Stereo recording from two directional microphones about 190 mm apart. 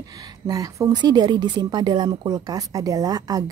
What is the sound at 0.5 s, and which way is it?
A woman's voice, 20° right (ahead or behind).